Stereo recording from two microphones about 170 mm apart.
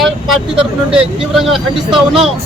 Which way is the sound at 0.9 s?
5° right (ahead or behind).